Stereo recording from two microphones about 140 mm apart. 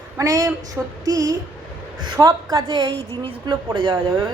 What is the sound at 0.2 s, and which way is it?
A woman's voice, 25° right (ahead or behind).